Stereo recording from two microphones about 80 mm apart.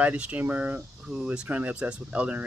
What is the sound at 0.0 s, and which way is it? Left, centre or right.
Speech, centre.